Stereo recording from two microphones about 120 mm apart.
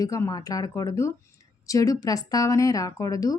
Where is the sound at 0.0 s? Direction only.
30° left (ahead or behind).